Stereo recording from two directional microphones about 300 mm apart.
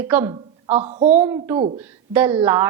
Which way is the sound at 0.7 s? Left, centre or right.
Right.